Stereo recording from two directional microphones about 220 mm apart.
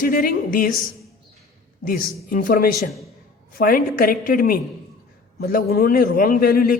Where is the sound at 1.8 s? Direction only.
40° left (ahead or behind).